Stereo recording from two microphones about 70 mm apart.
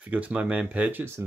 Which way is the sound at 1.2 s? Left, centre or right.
Right.